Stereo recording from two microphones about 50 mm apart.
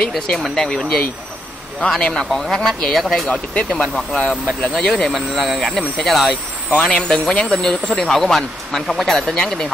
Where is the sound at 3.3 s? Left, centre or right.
Left.